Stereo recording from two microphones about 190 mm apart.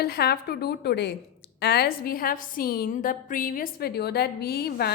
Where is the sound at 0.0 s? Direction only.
55° left (ahead or behind).